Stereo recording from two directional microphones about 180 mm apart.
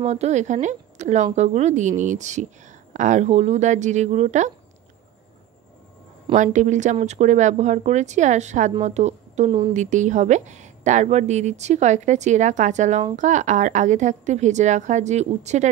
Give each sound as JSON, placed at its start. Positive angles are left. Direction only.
{"t": 0.0, "sound": "a woman's voice", "side_deg": -40}
{"t": 6.3, "sound": "a woman's voice", "side_deg": -45}